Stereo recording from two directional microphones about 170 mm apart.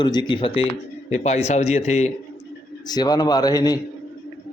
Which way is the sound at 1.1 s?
40° left (ahead or behind).